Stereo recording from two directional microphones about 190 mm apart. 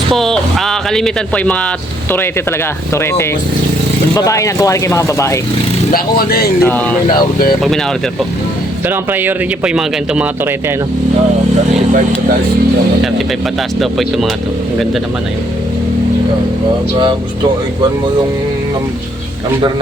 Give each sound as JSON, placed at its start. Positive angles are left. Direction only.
{"t": 0.1, "sound": "speech", "side_deg": 0}
{"t": 2.9, "sound": "speech", "side_deg": 15}
{"t": 5.9, "sound": "speech", "side_deg": 50}
{"t": 6.6, "sound": "speech", "side_deg": 10}
{"t": 8.9, "sound": "speech", "side_deg": -10}